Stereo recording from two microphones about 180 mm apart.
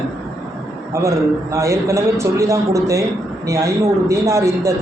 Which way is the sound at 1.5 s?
15° right (ahead or behind).